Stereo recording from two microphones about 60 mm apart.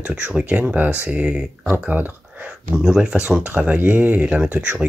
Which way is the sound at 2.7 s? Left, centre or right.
Centre.